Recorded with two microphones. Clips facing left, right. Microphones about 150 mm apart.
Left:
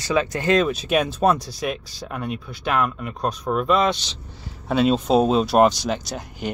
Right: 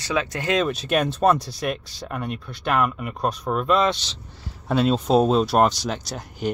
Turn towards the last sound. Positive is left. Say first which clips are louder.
# even
turn(degrees=0)  # may be behind; listen again after turning